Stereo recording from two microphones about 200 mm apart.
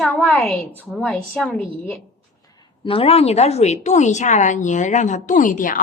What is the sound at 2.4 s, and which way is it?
A woman's voice, 20° left (ahead or behind).